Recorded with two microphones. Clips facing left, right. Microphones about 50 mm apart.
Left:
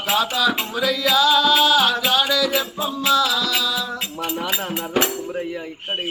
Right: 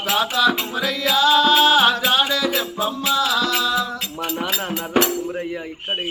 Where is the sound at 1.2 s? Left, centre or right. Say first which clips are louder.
Right 2 dB; right.